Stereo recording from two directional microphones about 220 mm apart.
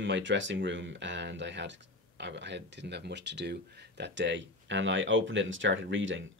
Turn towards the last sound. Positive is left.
turn(degrees=-60)  # may be behind; listen again after turning